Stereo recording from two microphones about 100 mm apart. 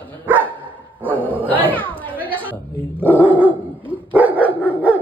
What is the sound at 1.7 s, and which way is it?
Chatter, 60° right (ahead or behind).